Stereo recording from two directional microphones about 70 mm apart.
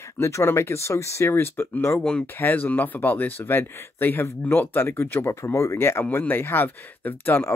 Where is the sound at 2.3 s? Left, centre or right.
Left.